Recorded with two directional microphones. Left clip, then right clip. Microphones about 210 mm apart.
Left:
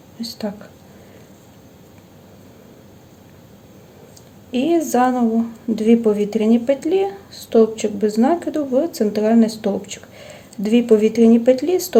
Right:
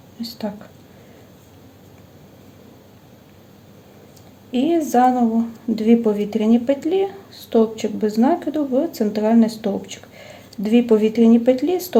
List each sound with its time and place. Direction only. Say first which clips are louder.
0.2 s speech: left 1 dB; 5° left (ahead or behind)
4.5 s speech: even; 5° left (ahead or behind)